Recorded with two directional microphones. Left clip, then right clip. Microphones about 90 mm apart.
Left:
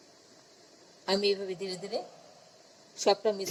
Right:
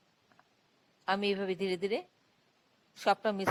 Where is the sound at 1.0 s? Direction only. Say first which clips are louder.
Left 3 dB; 35° right (ahead or behind).